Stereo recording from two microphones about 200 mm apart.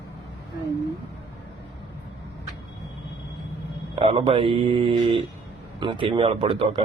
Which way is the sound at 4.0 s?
30° right (ahead or behind).